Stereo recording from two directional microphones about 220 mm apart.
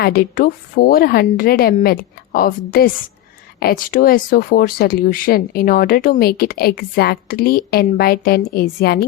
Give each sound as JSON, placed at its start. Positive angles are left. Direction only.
{"t": 0.0, "sound": "a woman's voice", "side_deg": 45}